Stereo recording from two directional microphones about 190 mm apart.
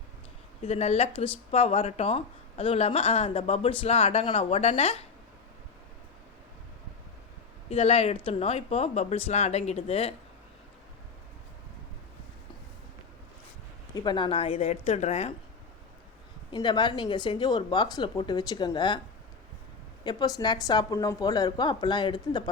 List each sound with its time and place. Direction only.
0.6 s speech: 35° left (ahead or behind)
7.7 s speech: 30° left (ahead or behind)
13.9 s speech: 25° left (ahead or behind)
16.5 s speech: 25° left (ahead or behind)
20.1 s speech: 20° left (ahead or behind)